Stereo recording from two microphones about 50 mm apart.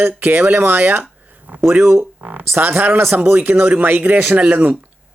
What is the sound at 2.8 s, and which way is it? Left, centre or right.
Speech, right.